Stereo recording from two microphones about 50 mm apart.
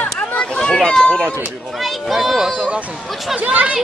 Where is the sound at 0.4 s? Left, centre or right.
Centre.